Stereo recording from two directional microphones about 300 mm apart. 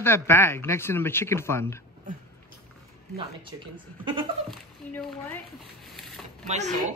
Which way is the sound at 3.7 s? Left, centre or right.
Centre.